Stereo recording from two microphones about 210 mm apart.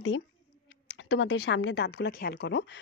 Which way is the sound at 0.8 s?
55° left (ahead or behind).